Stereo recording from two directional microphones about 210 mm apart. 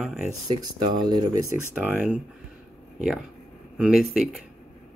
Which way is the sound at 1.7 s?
5° right (ahead or behind).